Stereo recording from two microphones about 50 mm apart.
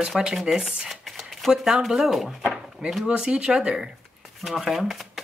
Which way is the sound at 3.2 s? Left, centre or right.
Centre.